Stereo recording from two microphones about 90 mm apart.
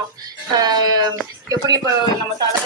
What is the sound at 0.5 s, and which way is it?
Speech, 50° right (ahead or behind).